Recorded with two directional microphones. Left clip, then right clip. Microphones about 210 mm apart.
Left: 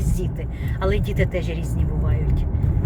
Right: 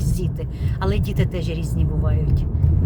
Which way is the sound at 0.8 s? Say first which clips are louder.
Left 2 dB; 15° right (ahead or behind).